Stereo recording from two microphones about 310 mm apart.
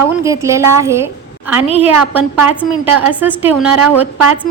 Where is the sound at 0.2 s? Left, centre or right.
Centre.